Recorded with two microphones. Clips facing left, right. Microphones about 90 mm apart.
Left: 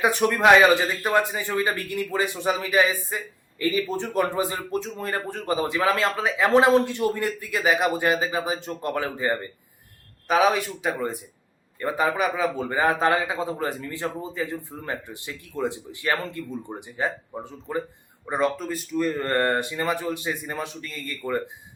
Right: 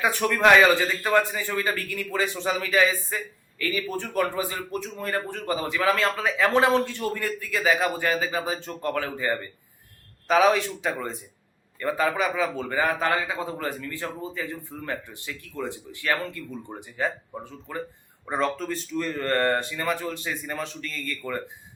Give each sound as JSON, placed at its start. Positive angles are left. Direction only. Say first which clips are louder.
{"t": 0.0, "sound": "a man's voice", "louder": "left 2 dB", "side_deg": 20}
{"t": 10.2, "sound": "a man's voice", "louder": "right 1 dB", "side_deg": 10}
{"t": 18.3, "sound": "speech", "louder": "left 2 dB", "side_deg": 10}